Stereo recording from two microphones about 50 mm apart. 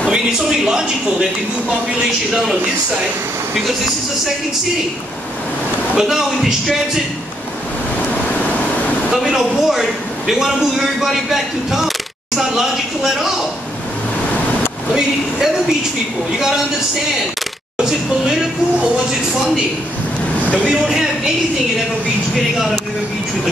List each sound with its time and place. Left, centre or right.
0.1 s a sound: centre
5.9 s a man's voice: centre
8.0 s vehicle: left
9.1 s a man's voice: centre
14.9 s a man's voice: centre
17.7 s speech: centre
20.6 s a man's voice: centre